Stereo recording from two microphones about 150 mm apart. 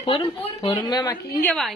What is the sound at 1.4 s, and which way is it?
Speech, 5° left (ahead or behind).